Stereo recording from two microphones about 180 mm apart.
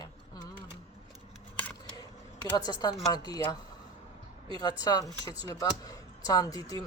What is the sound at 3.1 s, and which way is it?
Speech, 20° left (ahead or behind).